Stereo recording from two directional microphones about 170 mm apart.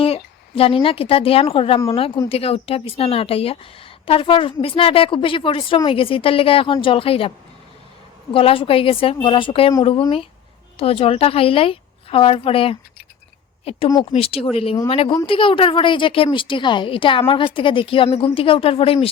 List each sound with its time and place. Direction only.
0.5 s a woman's voice: 35° left (ahead or behind)
10.8 s a woman's voice: 35° left (ahead or behind)